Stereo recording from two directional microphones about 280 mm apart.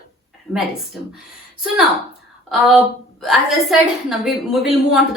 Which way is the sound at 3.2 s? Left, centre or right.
Centre.